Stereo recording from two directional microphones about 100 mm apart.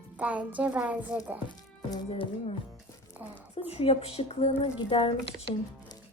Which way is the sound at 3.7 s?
80° left.